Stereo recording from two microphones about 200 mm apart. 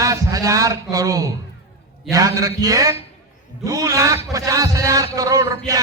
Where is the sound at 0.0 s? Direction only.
15° right (ahead or behind).